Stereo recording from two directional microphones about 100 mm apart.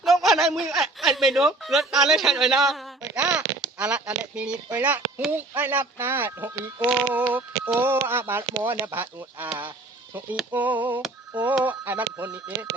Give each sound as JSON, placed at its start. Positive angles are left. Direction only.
{"t": 0.0, "sound": "speech", "side_deg": 0}
{"t": 10.5, "sound": "speech", "side_deg": -15}
{"t": 12.1, "sound": "speech", "side_deg": -30}